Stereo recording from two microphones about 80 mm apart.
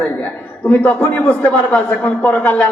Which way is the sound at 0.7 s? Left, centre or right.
Centre.